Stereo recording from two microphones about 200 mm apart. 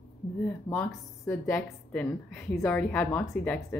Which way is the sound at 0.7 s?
15° left (ahead or behind).